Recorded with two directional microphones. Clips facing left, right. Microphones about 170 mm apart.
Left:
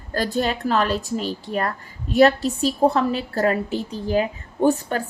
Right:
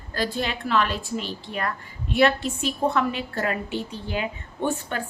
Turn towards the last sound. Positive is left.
turn(degrees=40)  # may be behind; listen again after turning